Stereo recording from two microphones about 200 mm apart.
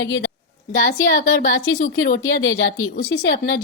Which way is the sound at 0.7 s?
40° left (ahead or behind).